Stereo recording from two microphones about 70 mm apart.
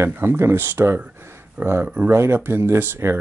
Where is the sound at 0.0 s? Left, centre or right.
Right.